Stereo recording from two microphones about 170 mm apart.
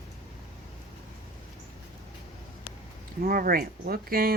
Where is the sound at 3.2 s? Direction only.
60° right (ahead or behind).